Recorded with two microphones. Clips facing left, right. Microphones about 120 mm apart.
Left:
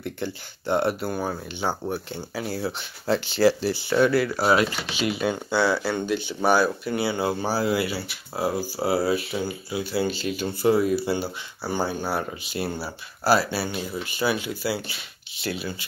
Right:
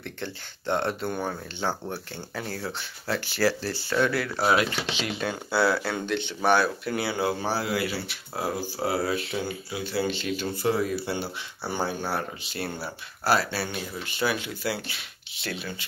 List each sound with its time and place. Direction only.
0.0 s speech: 10° left (ahead or behind)
3.1 s speech: 25° left (ahead or behind)
4.1 s speech: centre (ahead or behind)